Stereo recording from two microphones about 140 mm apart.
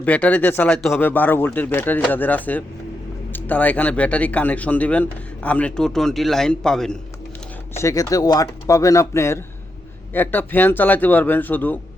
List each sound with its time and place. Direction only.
0.0 s speech: 10° left (ahead or behind)
7.8 s speech: 25° left (ahead or behind)